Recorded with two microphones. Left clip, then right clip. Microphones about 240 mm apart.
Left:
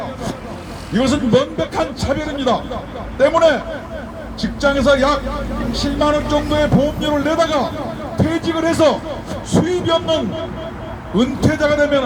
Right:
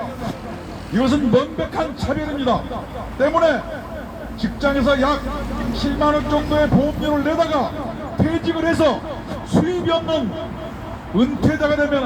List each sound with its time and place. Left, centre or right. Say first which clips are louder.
0.9 s a man's voice: left 2 dB; left